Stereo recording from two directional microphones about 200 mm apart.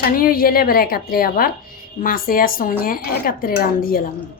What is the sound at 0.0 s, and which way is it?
Speech, 45° left (ahead or behind).